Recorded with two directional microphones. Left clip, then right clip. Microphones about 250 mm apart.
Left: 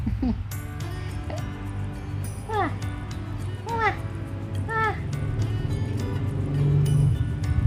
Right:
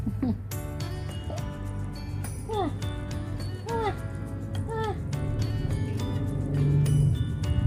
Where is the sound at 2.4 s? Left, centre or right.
Centre.